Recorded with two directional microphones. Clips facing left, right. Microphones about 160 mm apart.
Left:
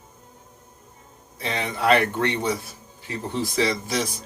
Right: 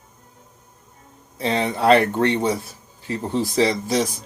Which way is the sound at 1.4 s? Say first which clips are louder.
Right 5 dB; 30° right (ahead or behind).